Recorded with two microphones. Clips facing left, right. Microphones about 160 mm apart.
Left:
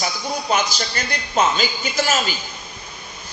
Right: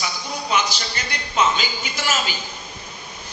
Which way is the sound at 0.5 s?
45° left (ahead or behind).